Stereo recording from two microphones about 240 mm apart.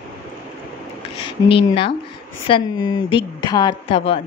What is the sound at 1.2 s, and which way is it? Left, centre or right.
A woman's voice, left.